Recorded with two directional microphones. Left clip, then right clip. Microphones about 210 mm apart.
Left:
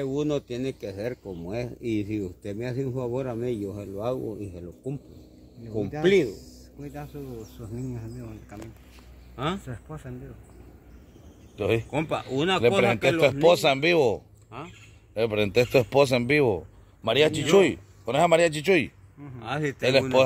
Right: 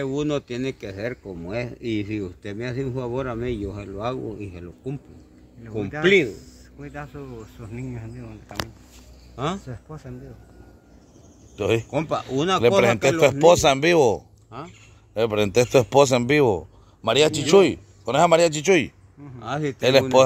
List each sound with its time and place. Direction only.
0.0 s a man's voice: 40° right (ahead or behind)
6.8 s speech: centre (ahead or behind)
9.7 s speech: 10° right (ahead or behind)
11.5 s speech: 15° right (ahead or behind)
11.9 s speech: 55° right (ahead or behind)
12.8 s a man's voice: 20° right (ahead or behind)
15.1 s speech: 15° right (ahead or behind)
19.4 s speech: 45° right (ahead or behind)
19.8 s a man's voice: 25° right (ahead or behind)